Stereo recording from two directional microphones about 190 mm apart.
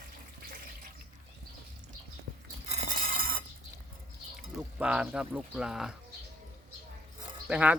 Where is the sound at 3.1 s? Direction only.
50° right (ahead or behind).